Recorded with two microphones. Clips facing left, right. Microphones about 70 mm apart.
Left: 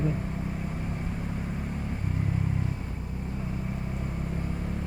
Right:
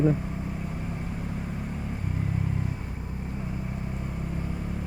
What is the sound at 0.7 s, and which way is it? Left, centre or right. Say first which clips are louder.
Vehicle: even; centre.